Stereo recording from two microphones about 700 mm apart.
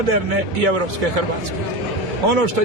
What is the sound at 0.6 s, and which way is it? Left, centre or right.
Speech, right.